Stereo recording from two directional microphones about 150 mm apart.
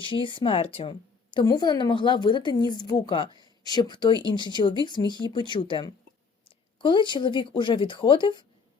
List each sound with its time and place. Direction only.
0.0 s a woman's voice: 35° left (ahead or behind)